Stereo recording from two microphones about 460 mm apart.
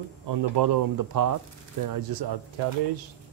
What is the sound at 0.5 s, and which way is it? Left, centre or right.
Speech, right.